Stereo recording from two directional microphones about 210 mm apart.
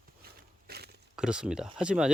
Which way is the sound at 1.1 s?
5° right (ahead or behind).